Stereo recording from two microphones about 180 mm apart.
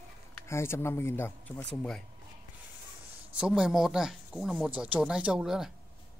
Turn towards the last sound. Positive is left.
turn(degrees=-5)  # may be behind; listen again after turning